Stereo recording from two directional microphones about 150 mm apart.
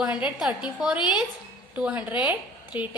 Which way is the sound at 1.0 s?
30° left (ahead or behind).